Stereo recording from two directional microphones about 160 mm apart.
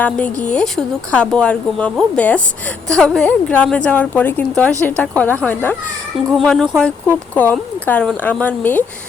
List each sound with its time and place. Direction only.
0.0 s speech: 10° left (ahead or behind)